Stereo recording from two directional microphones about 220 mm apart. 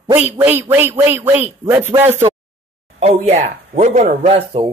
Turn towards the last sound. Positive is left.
turn(degrees=-25)  # may be behind; listen again after turning